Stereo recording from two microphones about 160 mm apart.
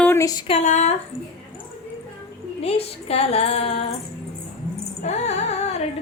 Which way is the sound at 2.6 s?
40° left (ahead or behind).